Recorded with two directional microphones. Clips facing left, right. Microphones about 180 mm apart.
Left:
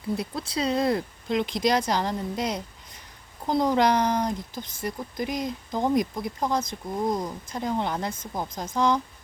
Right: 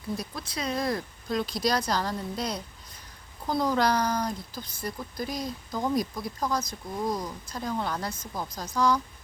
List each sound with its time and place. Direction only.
0.2 s speech: 30° left (ahead or behind)